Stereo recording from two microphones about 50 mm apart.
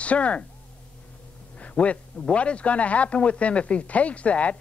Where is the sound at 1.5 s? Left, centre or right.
Left.